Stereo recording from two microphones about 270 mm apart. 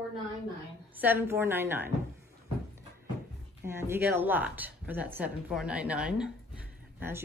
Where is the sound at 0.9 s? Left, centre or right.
Centre.